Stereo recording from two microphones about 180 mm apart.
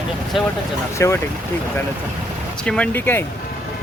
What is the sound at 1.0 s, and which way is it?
Speech, 15° left (ahead or behind).